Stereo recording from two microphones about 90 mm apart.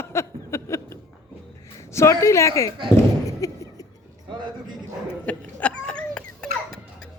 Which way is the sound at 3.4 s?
35° left (ahead or behind).